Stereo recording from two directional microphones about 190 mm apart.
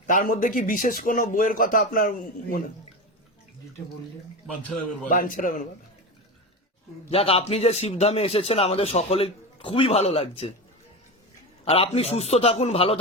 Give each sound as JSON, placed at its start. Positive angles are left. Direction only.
{"t": 0.1, "sound": "a man's voice", "side_deg": 45}
{"t": 5.0, "sound": "a man's voice", "side_deg": 45}
{"t": 7.1, "sound": "a man's voice", "side_deg": 30}
{"t": 11.6, "sound": "a man's voice", "side_deg": 30}